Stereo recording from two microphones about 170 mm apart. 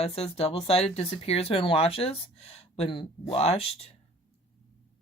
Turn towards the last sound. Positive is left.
turn(degrees=40)  # may be behind; listen again after turning